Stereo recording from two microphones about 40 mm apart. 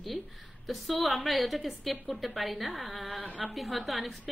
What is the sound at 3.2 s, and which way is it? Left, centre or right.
Speech, right.